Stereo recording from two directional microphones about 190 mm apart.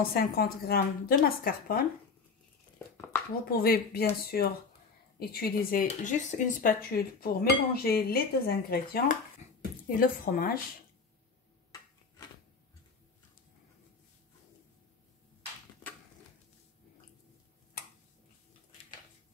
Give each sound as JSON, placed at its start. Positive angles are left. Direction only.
{"t": 0.1, "sound": "speech", "side_deg": 50}
{"t": 3.4, "sound": "speech", "side_deg": 55}
{"t": 9.4, "sound": "a sound", "side_deg": 40}
{"t": 9.9, "sound": "speech", "side_deg": 50}